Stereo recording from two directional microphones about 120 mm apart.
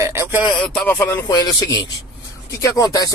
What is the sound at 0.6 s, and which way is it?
Speech, 5° left (ahead or behind).